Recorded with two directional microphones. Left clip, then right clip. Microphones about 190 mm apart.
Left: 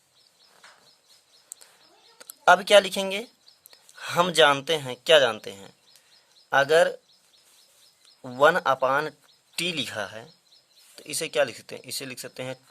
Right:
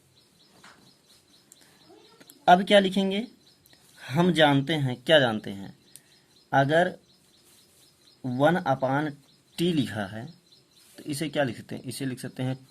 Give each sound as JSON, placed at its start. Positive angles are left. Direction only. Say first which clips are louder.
{"t": 2.1, "sound": "speech", "louder": "left 1 dB", "side_deg": 50}
{"t": 8.2, "sound": "speech", "louder": "left 4 dB", "side_deg": 45}